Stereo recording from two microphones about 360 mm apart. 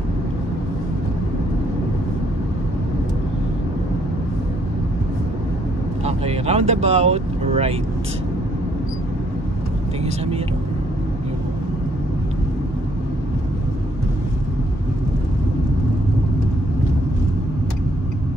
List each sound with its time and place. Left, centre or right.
6.0 s speech: centre